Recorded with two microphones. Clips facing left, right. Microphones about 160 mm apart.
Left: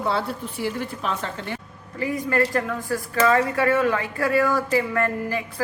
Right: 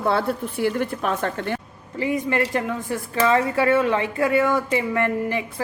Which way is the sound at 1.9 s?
25° right (ahead or behind).